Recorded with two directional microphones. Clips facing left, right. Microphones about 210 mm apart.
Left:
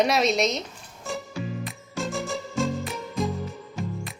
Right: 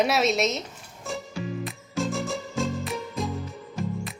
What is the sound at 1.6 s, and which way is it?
Music, centre (ahead or behind).